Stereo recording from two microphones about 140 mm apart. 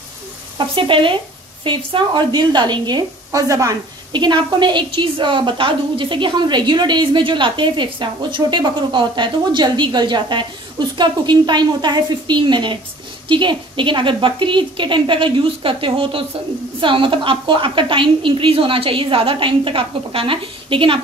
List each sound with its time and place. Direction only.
0.6 s speech: 35° right (ahead or behind)